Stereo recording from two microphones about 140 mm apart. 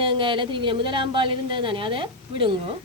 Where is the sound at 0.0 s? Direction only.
35° right (ahead or behind).